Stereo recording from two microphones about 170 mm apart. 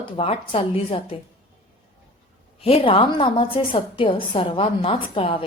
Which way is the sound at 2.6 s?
35° left (ahead or behind).